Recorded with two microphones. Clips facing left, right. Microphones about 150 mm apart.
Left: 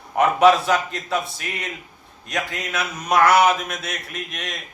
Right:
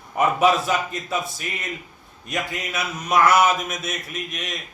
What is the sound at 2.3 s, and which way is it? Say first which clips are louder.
A man's voice: left 1 dB; centre (ahead or behind).